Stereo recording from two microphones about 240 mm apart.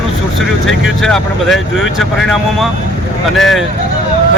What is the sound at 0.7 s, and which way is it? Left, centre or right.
Speech, centre.